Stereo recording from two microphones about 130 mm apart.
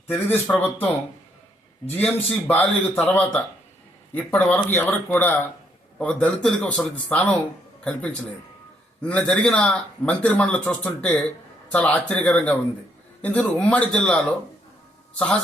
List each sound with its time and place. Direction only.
0.1 s a man's voice: 15° left (ahead or behind)
1.9 s a man's voice: 15° left (ahead or behind)